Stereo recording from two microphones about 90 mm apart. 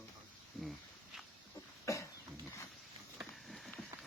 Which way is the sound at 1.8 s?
35° left (ahead or behind).